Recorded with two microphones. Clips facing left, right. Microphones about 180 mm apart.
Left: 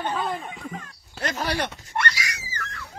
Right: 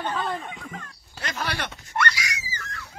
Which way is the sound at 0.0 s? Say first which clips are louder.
Left 1 dB; 10° left (ahead or behind).